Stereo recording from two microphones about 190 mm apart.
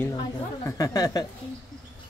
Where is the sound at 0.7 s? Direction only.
20° left (ahead or behind).